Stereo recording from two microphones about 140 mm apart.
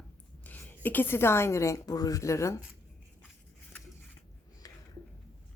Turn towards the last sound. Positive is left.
turn(degrees=25)  # may be behind; listen again after turning